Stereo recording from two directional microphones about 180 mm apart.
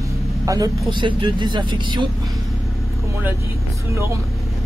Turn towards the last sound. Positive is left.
turn(degrees=-15)  # may be behind; listen again after turning